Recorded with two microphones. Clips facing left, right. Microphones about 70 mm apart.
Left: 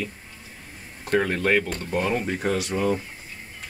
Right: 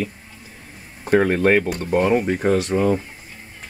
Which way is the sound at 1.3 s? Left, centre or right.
Right.